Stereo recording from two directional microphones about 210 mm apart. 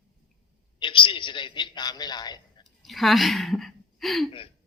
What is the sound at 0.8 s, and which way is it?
Speech, 25° left (ahead or behind).